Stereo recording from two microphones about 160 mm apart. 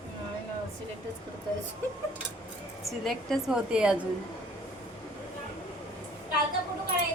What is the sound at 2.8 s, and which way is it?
A woman's voice, centre (ahead or behind).